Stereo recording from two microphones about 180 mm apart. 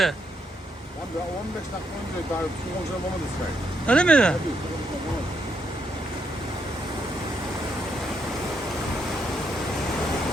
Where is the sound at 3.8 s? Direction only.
5° left (ahead or behind).